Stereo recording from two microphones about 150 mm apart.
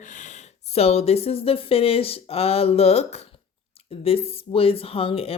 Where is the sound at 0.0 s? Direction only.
55° left (ahead or behind).